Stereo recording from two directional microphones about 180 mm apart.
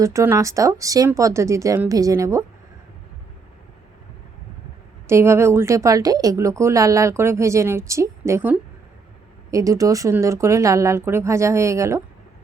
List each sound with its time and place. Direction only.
0.0 s speech: 15° right (ahead or behind)
5.0 s speech: 15° right (ahead or behind)